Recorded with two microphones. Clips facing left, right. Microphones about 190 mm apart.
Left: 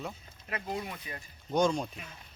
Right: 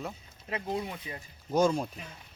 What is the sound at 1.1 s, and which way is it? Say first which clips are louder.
Speech: right 2 dB; 25° right (ahead or behind).